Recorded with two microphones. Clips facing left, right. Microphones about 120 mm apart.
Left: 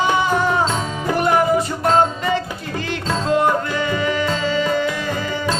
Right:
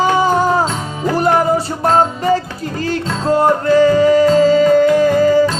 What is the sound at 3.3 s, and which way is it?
Music, 35° right (ahead or behind).